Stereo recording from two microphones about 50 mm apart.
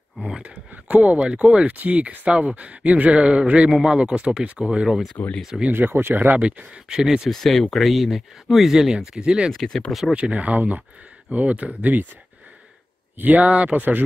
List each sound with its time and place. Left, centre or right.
1.4 s speech: right
1.7 s speech: right
5.2 s speech: left
5.7 s speech: right
6.4 s speech: centre
7.2 s speech: centre
9.5 s speech: centre
10.1 s speech: right
13.2 s speech: right